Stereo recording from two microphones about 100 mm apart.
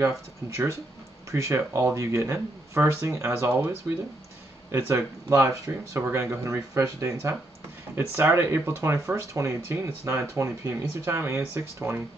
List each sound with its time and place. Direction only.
0.0 s speech: 30° right (ahead or behind)